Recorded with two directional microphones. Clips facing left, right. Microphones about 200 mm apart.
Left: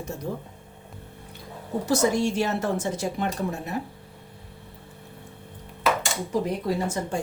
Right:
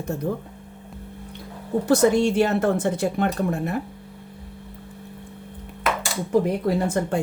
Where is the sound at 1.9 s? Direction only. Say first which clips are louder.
Right 5 dB; 60° right (ahead or behind).